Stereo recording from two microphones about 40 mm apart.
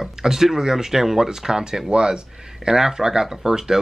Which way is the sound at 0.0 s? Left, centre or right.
Centre.